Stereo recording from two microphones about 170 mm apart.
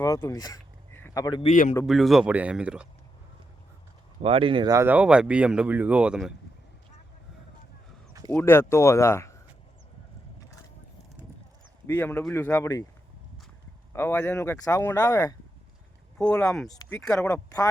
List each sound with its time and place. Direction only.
0.0 s speech: 20° left (ahead or behind)
1.4 s speech: 45° left (ahead or behind)
1.9 s speech: centre (ahead or behind)
4.2 s speech: 35° right (ahead or behind)
4.9 s speech: 5° right (ahead or behind)
8.1 s a sound: 20° right (ahead or behind)
8.4 s speech: 15° left (ahead or behind)
11.9 s speech: 10° left (ahead or behind)
13.9 s speech: 15° left (ahead or behind)
16.1 s speech: 5° left (ahead or behind)